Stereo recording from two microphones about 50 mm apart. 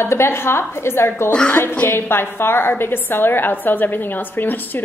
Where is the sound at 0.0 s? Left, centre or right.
Left.